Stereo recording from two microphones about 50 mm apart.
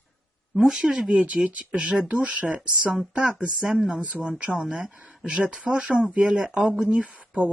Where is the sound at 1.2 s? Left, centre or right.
Right.